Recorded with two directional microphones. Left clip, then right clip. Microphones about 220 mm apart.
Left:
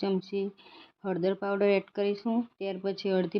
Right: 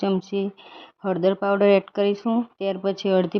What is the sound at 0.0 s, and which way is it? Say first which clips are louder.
Speech: right 6 dB; 15° right (ahead or behind).